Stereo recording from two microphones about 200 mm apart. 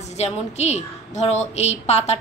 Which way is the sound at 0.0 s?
35° left (ahead or behind).